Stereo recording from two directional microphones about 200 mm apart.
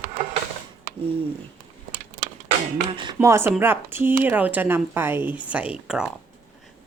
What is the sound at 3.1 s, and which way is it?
Speech, 10° right (ahead or behind).